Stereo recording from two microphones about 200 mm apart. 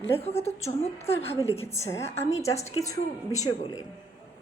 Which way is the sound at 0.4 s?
30° left (ahead or behind).